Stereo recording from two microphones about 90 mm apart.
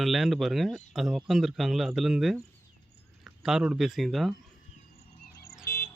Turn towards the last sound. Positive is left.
turn(degrees=30)  # may be behind; listen again after turning